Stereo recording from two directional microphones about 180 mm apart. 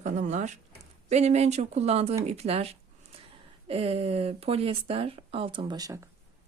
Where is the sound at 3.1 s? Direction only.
35° right (ahead or behind).